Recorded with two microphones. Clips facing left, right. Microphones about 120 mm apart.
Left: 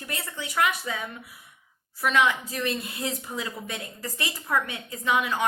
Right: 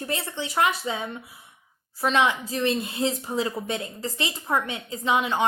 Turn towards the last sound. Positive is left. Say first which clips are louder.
# right 2 dB
turn(degrees=-25)  # may be behind; listen again after turning